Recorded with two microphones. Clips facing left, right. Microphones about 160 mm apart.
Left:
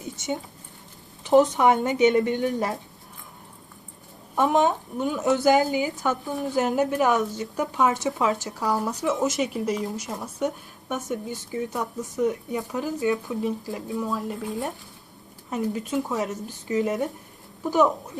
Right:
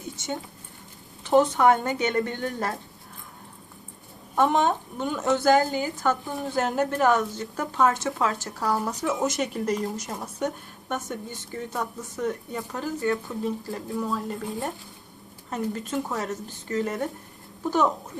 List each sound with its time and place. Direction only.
0.0 s a sound: 20° left (ahead or behind)
1.2 s speech: 15° left (ahead or behind)
4.6 s a woman's voice: 5° left (ahead or behind)
5.4 s a woman's voice: 15° left (ahead or behind)
6.2 s a woman's voice: centre (ahead or behind)
6.9 s a woman's voice: 15° left (ahead or behind)
8.7 s a woman's voice: 5° left (ahead or behind)
13.4 s a woman's voice: 15° left (ahead or behind)
13.8 s a woman's voice: centre (ahead or behind)